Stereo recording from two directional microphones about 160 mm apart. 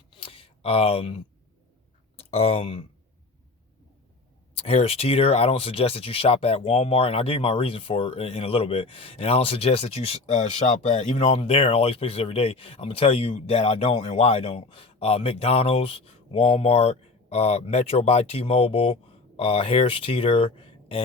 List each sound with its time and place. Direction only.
0.1 s a sound: 35° left (ahead or behind)
2.1 s speech: 40° left (ahead or behind)
4.5 s speech: 40° left (ahead or behind)